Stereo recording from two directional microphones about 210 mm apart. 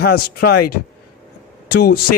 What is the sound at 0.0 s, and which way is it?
Speech, 45° left (ahead or behind).